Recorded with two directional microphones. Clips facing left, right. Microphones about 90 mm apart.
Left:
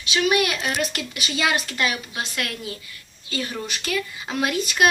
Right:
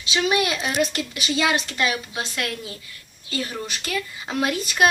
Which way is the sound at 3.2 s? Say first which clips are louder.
Even; 30° right (ahead or behind).